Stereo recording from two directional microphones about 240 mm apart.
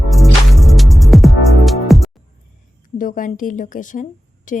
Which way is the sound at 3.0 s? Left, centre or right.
Left.